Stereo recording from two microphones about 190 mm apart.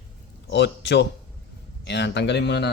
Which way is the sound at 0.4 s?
65° left (ahead or behind).